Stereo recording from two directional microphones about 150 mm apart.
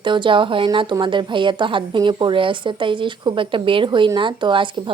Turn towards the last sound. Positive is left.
turn(degrees=-30)  # may be behind; listen again after turning